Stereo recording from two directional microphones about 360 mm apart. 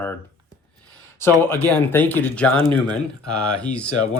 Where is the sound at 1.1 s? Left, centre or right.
Centre.